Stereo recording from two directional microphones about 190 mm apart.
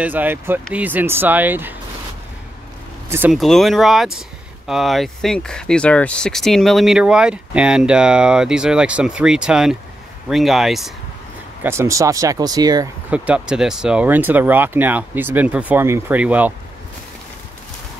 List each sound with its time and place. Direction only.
0.0 s speech: 10° right (ahead or behind)
3.1 s speech: 10° right (ahead or behind)
3.3 s speech: centre (ahead or behind)
11.6 s speech: 15° right (ahead or behind)
13.1 s speech: 5° right (ahead or behind)